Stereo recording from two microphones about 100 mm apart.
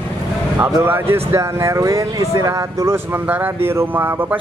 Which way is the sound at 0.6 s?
20° right (ahead or behind).